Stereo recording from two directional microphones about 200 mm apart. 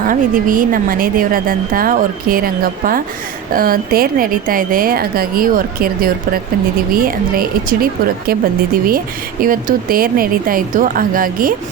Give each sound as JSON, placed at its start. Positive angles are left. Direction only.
{"t": 0.1, "sound": "a woman's voice", "side_deg": -45}